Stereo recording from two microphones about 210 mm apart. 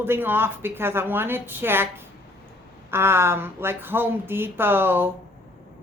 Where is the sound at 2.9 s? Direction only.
10° right (ahead or behind).